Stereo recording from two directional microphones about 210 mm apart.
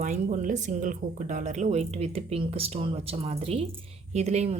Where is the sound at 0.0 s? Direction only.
35° right (ahead or behind).